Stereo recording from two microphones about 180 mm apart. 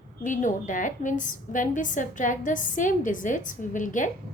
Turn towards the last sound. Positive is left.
turn(degrees=45)  # may be behind; listen again after turning